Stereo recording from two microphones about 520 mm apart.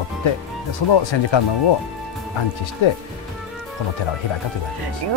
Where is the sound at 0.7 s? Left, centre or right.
Left.